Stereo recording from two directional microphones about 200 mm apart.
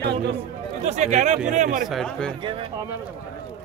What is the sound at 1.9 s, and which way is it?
Speech, centre (ahead or behind).